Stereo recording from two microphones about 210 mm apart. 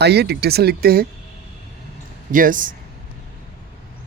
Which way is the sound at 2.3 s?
40° right (ahead or behind).